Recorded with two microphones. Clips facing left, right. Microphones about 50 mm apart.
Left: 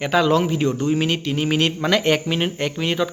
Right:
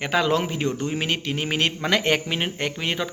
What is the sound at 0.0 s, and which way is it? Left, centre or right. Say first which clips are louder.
Speech: left 4 dB; centre.